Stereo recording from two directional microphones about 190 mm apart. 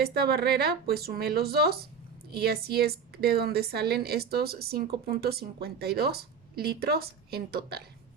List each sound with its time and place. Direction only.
0.0 s speech: 55° right (ahead or behind)